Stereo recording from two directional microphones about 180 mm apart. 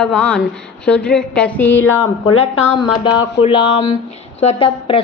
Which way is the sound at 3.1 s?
30° left (ahead or behind).